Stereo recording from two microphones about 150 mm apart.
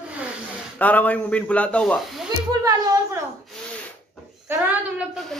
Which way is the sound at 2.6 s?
25° right (ahead or behind).